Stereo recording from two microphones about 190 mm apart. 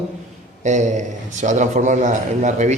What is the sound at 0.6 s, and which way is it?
A man's voice, 40° right (ahead or behind).